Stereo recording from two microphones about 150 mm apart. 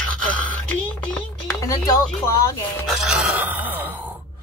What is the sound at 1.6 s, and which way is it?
Speech, 20° left (ahead or behind).